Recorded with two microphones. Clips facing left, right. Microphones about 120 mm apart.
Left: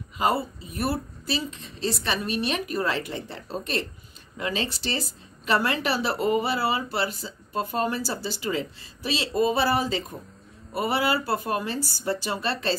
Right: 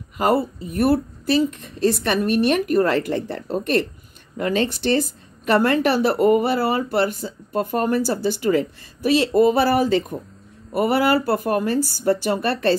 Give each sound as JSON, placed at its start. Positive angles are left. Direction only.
{"t": 0.2, "sound": "a woman's voice", "side_deg": -60}